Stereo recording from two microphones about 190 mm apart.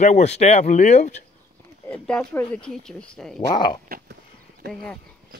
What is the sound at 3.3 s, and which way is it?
Speech, 25° left (ahead or behind).